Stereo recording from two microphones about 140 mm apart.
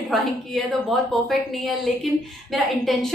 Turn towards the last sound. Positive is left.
turn(degrees=0)  # may be behind; listen again after turning